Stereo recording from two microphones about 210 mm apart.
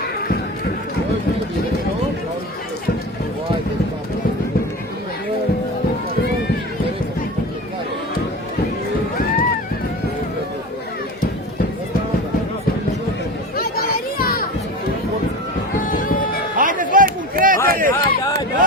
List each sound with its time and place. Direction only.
9.1 s run: 40° left (ahead or behind)
13.6 s children playing: 45° left (ahead or behind)
15.8 s music: 40° left (ahead or behind)
16.6 s a sound: 40° right (ahead or behind)